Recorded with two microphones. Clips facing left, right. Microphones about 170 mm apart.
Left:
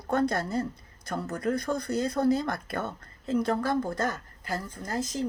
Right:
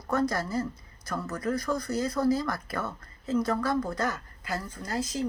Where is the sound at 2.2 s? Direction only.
25° left (ahead or behind).